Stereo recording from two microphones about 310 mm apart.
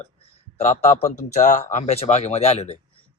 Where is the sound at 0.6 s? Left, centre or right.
Left.